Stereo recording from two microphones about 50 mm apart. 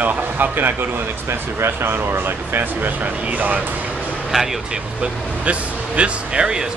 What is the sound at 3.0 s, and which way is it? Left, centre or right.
Speech, right.